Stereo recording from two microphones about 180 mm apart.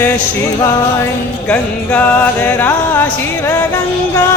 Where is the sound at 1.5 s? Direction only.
10° left (ahead or behind).